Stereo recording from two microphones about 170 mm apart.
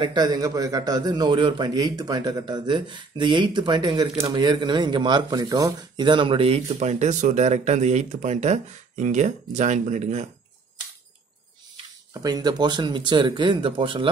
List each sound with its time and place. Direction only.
0.0 s a man's voice: 25° right (ahead or behind); by 10.2 s 40° right (ahead or behind)
12.1 s a man's voice: 20° right (ahead or behind)